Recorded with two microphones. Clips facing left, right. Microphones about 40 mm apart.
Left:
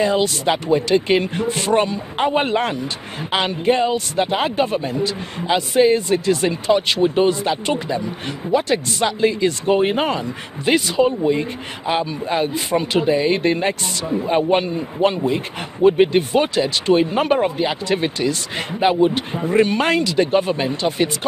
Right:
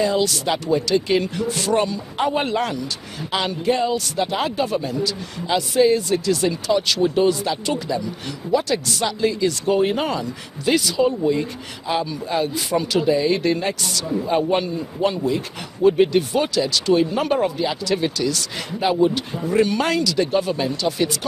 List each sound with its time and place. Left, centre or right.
0.0 s speech: left